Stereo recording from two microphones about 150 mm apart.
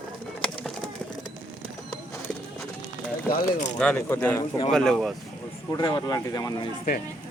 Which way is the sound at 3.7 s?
10° left (ahead or behind).